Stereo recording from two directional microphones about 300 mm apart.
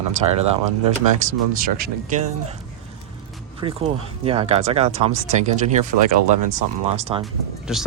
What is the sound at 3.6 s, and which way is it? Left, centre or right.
Speech, centre.